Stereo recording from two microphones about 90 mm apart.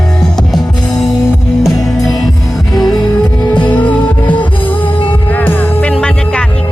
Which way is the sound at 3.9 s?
15° left (ahead or behind).